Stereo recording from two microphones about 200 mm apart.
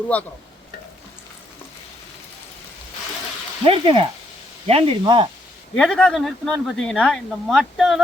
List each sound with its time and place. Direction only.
0.1 s stir: 5° left (ahead or behind)
3.7 s speech: 25° right (ahead or behind)
5.7 s speech: 5° left (ahead or behind)